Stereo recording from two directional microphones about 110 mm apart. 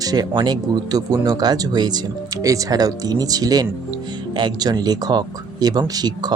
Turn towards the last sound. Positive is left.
turn(degrees=-40)  # may be behind; listen again after turning